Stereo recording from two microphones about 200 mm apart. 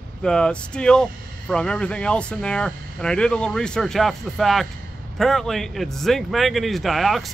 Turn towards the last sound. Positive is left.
turn(degrees=0)  # may be behind; listen again after turning